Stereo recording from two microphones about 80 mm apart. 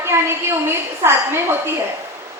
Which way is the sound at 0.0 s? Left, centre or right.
Right.